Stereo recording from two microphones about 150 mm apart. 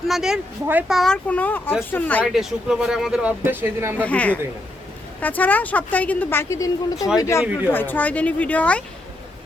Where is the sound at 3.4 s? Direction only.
15° right (ahead or behind).